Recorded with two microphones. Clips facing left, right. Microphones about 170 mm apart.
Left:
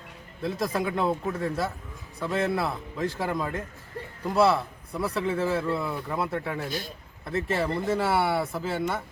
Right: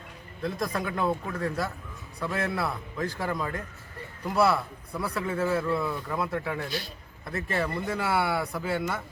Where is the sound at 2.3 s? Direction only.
20° left (ahead or behind).